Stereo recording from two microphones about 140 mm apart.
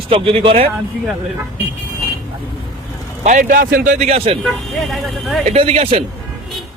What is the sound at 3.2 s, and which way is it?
Speech, 80° right.